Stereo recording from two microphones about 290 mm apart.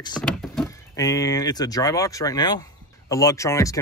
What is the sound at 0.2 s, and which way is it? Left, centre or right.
Speech, centre.